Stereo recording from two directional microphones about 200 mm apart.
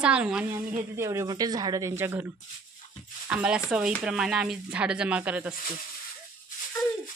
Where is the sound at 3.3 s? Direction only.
5° right (ahead or behind).